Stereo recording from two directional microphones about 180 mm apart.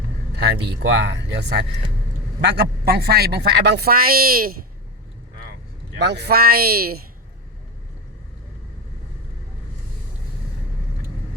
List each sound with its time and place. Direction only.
0.7 s speech: 75° right (ahead or behind); by 4.5 s 55° right (ahead or behind)
6.0 s speech: 70° right (ahead or behind)